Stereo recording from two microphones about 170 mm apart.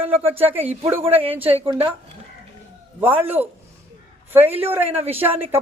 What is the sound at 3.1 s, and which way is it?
A man's voice, 10° right (ahead or behind).